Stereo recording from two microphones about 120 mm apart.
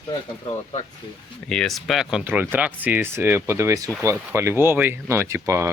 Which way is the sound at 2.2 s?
15° right (ahead or behind).